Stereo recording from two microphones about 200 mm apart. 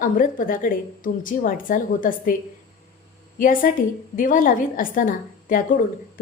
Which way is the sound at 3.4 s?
40° left (ahead or behind).